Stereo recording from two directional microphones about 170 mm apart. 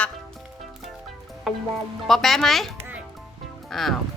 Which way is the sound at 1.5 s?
Centre (ahead or behind).